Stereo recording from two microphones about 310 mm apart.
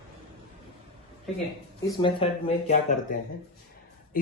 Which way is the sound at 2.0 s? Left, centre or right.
Centre.